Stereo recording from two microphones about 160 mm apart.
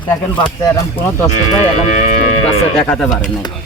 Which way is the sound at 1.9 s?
45° left (ahead or behind).